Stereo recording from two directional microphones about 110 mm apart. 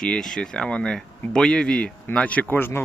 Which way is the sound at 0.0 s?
5° left (ahead or behind).